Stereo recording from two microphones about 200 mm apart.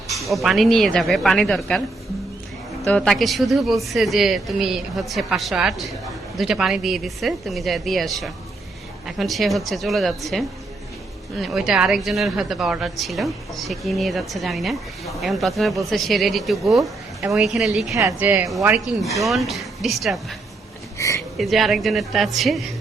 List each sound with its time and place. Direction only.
0.3 s a woman's voice: centre (ahead or behind)
2.8 s a woman's voice: 5° left (ahead or behind)
17.9 s a woman's voice: 10° right (ahead or behind)
21.0 s speech: 15° left (ahead or behind)
21.3 s a woman's voice: centre (ahead or behind)